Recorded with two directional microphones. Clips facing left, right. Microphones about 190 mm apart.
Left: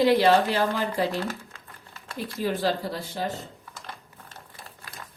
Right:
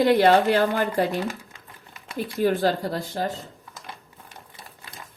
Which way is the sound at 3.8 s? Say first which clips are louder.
Right 1 dB; 15° right (ahead or behind).